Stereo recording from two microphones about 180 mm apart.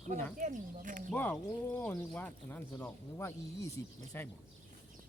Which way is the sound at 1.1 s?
10° left (ahead or behind).